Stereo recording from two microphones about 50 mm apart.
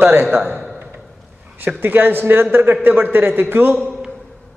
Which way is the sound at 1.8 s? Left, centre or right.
Right.